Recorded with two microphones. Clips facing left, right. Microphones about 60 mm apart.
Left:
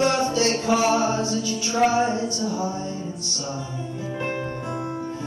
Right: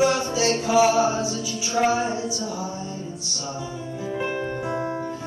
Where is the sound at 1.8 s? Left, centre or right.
Centre.